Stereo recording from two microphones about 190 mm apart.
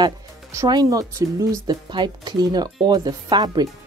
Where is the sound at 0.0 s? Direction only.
20° right (ahead or behind).